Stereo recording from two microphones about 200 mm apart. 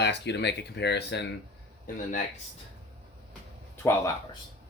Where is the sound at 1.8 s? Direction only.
40° left (ahead or behind).